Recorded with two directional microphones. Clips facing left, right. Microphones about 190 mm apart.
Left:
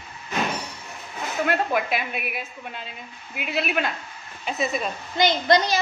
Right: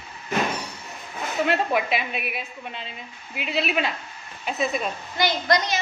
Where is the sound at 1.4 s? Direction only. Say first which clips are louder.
Even; centre (ahead or behind).